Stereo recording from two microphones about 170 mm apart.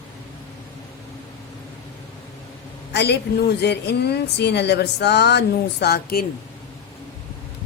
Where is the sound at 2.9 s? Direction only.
80° left.